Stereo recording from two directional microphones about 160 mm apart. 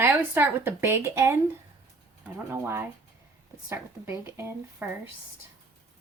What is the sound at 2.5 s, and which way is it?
Speech, 15° right (ahead or behind).